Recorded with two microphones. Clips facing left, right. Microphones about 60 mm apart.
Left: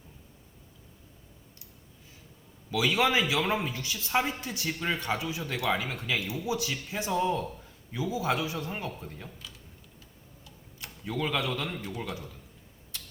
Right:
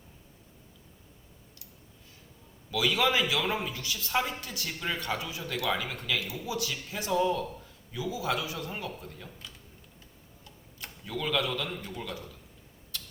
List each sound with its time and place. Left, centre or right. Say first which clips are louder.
2.7 s a man's voice: left 1 dB; left
11.0 s a man's voice: even; centre